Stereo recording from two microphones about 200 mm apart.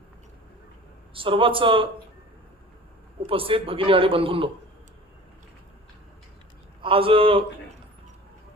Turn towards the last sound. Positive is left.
turn(degrees=-25)  # may be behind; listen again after turning